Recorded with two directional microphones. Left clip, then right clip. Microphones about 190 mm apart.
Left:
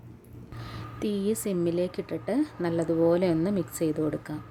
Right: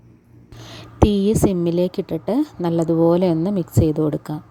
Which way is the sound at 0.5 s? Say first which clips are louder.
Right 16 dB; 35° right (ahead or behind).